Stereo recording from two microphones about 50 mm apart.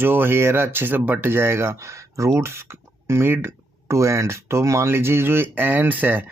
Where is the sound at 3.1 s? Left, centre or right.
Right.